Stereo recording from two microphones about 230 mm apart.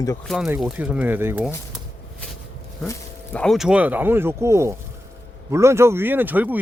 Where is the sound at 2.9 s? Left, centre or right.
Centre.